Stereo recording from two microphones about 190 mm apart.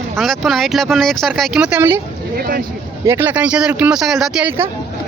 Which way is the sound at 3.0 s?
15° right (ahead or behind).